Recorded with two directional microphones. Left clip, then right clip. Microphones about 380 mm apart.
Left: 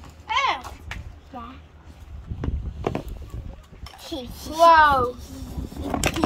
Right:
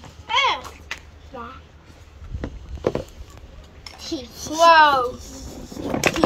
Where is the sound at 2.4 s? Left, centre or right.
Centre.